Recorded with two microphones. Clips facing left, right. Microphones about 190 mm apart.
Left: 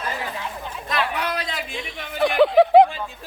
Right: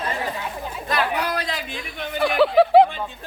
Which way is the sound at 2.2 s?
20° left (ahead or behind).